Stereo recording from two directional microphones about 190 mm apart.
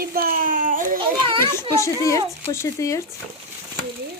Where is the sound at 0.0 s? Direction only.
50° right (ahead or behind).